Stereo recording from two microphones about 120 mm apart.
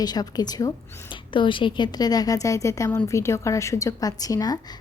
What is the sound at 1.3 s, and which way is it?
A woman's voice, 45° left (ahead or behind).